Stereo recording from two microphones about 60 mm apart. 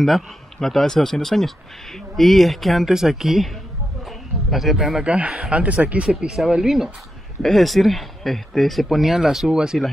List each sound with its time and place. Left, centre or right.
0.0 s speech: centre
4.5 s speech: centre
5.0 s speech: centre
6.0 s speech: centre